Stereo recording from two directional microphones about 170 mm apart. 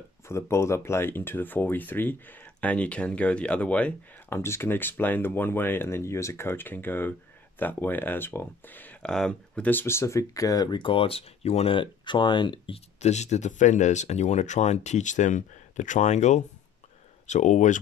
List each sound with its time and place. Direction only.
0.3 s speech: 15° left (ahead or behind); by 17.7 s 45° left (ahead or behind)